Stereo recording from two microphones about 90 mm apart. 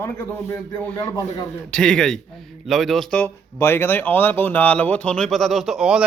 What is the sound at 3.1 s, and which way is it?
Speech, 25° left (ahead or behind).